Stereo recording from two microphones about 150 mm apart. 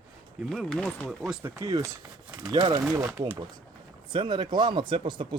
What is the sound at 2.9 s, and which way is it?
Speech, 10° right (ahead or behind).